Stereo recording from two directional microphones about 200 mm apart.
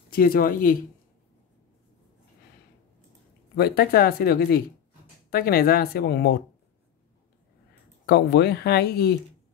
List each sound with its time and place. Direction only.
0.1 s speech: 45° left (ahead or behind)
3.5 s speech: 50° left (ahead or behind)
8.1 s speech: 55° left (ahead or behind)